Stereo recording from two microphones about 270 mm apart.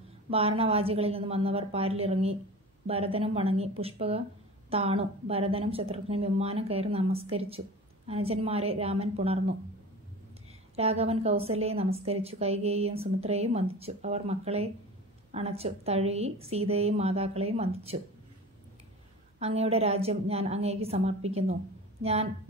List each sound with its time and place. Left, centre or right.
0.3 s a woman's voice: right
10.8 s a woman's voice: right
19.4 s a woman's voice: right